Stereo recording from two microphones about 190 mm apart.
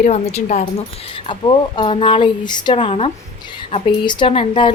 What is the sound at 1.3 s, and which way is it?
Speech, 25° left (ahead or behind).